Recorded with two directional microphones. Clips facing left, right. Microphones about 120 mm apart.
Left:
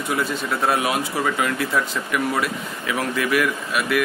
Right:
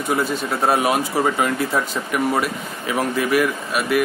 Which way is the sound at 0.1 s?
35° right (ahead or behind).